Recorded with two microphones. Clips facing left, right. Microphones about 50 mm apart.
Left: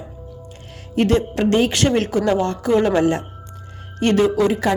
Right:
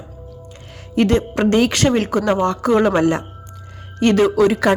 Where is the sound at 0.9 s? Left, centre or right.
Right.